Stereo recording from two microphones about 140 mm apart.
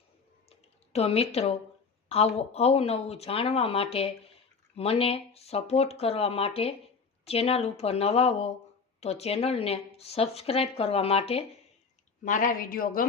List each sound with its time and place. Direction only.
0.9 s speech: 45° left (ahead or behind)
12.2 s speech: 65° left (ahead or behind); by 13.1 s 90° left